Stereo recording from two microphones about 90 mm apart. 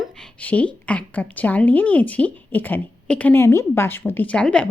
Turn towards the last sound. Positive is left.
turn(degrees=10)  # may be behind; listen again after turning